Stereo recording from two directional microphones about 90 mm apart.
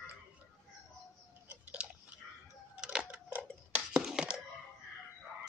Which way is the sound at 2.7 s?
10° right (ahead or behind).